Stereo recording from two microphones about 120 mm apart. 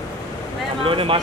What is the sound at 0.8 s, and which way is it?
Speech, 50° right (ahead or behind).